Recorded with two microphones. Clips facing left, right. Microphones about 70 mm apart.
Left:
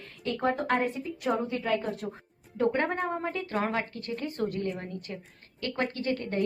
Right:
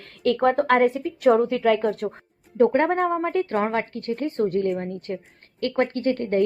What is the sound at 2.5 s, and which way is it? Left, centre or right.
A woman's voice, right.